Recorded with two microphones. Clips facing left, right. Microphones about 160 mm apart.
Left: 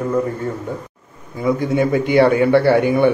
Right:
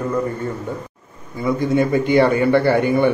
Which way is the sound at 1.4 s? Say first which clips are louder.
Left 1 dB; 10° left (ahead or behind).